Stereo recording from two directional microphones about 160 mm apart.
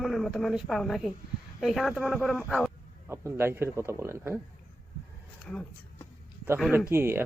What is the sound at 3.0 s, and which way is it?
A man's voice, 15° right (ahead or behind).